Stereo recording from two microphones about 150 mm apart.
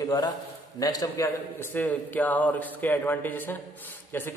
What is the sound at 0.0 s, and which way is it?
A man's voice, 25° left (ahead or behind).